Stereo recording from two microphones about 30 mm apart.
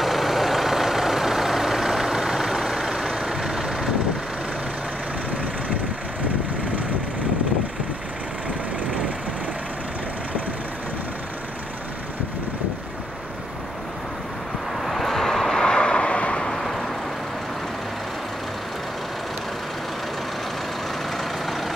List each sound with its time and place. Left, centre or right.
0.0 s vehicle: centre
14.8 s vehicle: centre
15.0 s vehicle: centre
15.6 s vehicle: left
16.5 s vehicle: centre
21.2 s vehicle: centre